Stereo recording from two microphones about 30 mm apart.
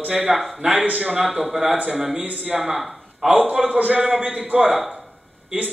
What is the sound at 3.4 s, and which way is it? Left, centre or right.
Speech, right.